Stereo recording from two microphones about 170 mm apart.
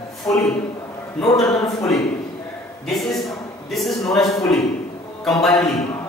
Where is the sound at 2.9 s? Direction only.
Centre (ahead or behind).